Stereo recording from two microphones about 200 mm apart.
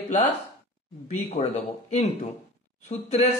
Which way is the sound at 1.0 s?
35° left (ahead or behind).